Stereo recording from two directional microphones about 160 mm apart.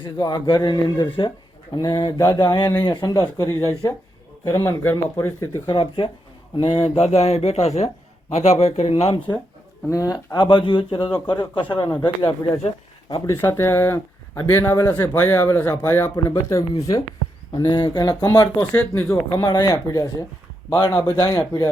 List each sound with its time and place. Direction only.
0.0 s speech: 25° left (ahead or behind)
5.6 s speech: 30° left (ahead or behind)
9.9 s speech: 20° left (ahead or behind)
13.2 s speech: 15° left (ahead or behind)
18.6 s speech: 10° left (ahead or behind)
19.4 s speech: 25° left (ahead or behind)